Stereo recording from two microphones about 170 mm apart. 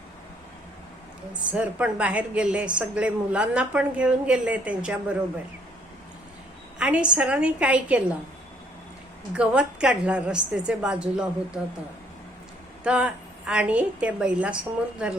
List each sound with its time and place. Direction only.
1.5 s a woman's voice: 10° right (ahead or behind)
6.7 s a woman's voice: 5° right (ahead or behind)
9.3 s a woman's voice: 5° right (ahead or behind)
12.8 s a woman's voice: 5° right (ahead or behind)